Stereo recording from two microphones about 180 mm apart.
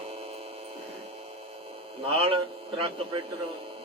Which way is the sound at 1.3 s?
30° right (ahead or behind).